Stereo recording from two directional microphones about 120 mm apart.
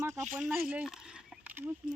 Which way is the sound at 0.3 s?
10° right (ahead or behind).